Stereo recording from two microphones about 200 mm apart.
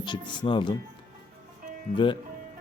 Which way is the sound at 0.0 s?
25° left (ahead or behind).